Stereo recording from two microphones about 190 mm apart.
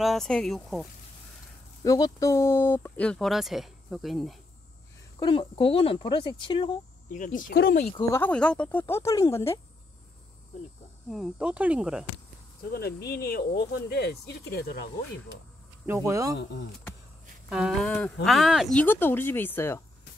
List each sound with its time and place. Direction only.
0.0 s speech: centre (ahead or behind)
1.8 s speech: 20° left (ahead or behind); by 4.4 s centre (ahead or behind)
5.2 s speech: 25° left (ahead or behind)
7.1 s speech: 40° left (ahead or behind)
8.1 s speech: 10° left (ahead or behind)
11.1 s speech: centre (ahead or behind)
12.6 s speech: 55° left (ahead or behind)
15.8 s speech: 15° right (ahead or behind)
17.5 s speech: centre (ahead or behind)